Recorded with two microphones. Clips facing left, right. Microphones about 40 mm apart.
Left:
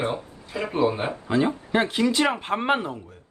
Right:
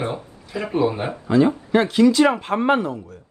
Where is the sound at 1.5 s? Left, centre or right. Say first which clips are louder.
Right 5 dB; centre.